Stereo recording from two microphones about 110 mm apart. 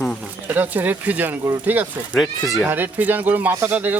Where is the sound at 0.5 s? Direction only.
15° right (ahead or behind).